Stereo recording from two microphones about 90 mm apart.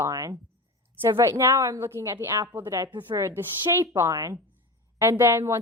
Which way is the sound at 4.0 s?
35° right (ahead or behind).